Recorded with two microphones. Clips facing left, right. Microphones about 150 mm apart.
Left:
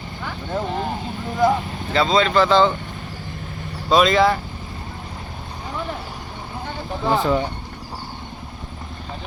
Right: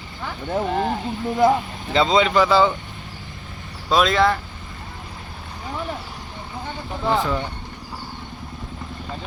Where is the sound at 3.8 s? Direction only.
Centre (ahead or behind).